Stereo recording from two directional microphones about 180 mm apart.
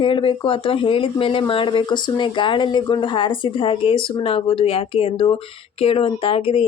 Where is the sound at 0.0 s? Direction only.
30° left (ahead or behind).